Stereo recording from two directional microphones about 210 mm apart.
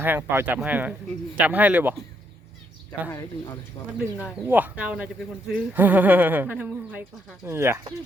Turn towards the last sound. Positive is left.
turn(degrees=-10)  # may be behind; listen again after turning